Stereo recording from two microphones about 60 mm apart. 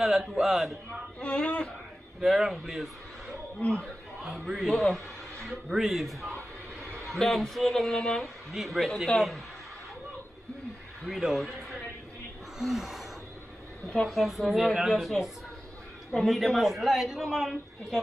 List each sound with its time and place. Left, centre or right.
0.0 s a man's voice: centre
1.2 s speech: centre
2.2 s a man's voice: centre
4.2 s a man's voice: centre
11.1 s a man's voice: centre
12.5 s gasp: centre
14.0 s a man's voice: centre